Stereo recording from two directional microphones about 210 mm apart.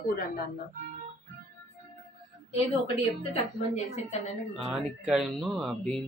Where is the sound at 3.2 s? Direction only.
30° left (ahead or behind).